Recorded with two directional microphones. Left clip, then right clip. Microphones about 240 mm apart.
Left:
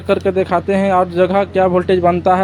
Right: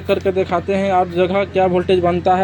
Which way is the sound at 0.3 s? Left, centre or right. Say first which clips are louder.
Left 2 dB; centre.